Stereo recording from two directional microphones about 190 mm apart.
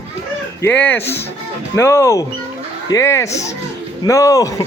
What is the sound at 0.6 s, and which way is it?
Speech, 10° left (ahead or behind).